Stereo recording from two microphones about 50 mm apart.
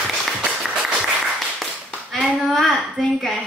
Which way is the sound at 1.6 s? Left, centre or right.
Centre.